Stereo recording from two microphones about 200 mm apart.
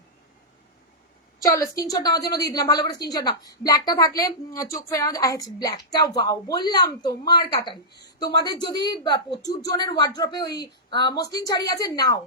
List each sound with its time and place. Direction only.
1.5 s a woman's voice: 15° left (ahead or behind)